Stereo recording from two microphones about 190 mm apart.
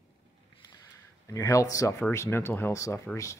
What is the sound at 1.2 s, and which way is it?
Speech, 15° left (ahead or behind).